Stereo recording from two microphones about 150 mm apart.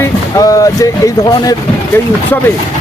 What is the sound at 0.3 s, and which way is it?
Speech, 25° left (ahead or behind).